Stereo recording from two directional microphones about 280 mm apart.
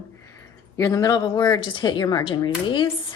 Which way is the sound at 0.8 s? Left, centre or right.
Centre.